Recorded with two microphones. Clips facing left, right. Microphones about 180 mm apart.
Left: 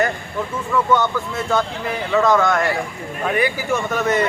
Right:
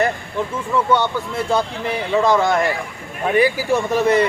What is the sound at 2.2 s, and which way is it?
Speech, 30° right (ahead or behind).